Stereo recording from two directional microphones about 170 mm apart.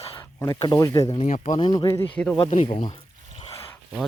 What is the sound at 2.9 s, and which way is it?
Pour, 30° left (ahead or behind).